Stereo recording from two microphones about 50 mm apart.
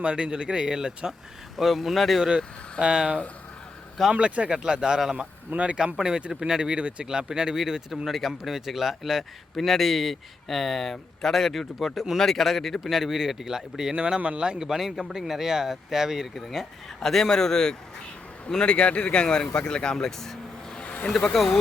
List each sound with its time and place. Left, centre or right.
0.0 s speech: centre
1.5 s speech: centre
2.3 s speech: centre
4.1 s speech: right
4.4 s speech: centre
5.5 s speech: right
5.7 s speech: centre
14.2 s speech: right; by 20.8 s centre
20.8 s vehicle: left
21.3 s speech: centre